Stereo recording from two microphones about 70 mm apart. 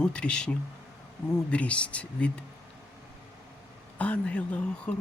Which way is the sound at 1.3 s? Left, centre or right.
Centre.